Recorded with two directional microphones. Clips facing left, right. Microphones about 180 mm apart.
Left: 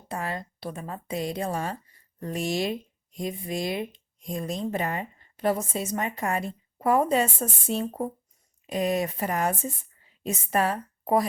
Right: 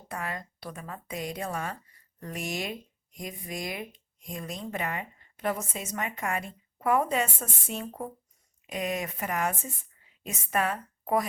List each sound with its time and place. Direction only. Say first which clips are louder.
0.1 s a woman's voice: left 4 dB; 30° left (ahead or behind)